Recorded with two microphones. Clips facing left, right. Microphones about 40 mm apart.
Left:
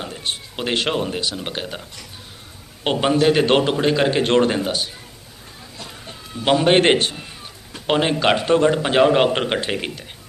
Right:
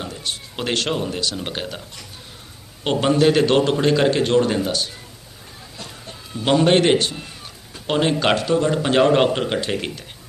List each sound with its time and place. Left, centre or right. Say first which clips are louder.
0.5 s speech: even; centre
0.8 s speech: left 3 dB; left
1.4 s speech: even; centre
2.8 s a man's voice: even; centre
3.4 s speech: even; left
3.7 s a man's voice: right 1 dB; centre
4.2 s speech: left 1 dB; left
4.5 s speech: even; left
6.4 s a man's voice: even; centre
6.8 s speech: left 1 dB; left
7.9 s a man's voice: left 1 dB; centre
8.4 s speech: left 3 dB; left
8.7 s a man's voice: even; centre
9.3 s speech: left 1 dB; left